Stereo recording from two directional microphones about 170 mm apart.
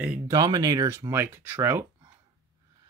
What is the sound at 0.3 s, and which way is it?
Speech, 20° right (ahead or behind).